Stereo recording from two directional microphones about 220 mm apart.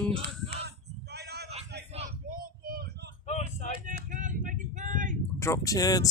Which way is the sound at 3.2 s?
30° left (ahead or behind).